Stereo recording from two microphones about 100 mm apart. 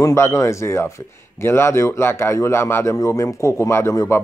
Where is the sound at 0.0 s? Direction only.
30° left (ahead or behind).